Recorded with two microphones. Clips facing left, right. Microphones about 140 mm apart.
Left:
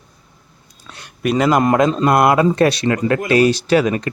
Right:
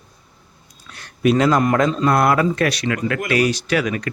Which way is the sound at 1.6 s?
25° left (ahead or behind).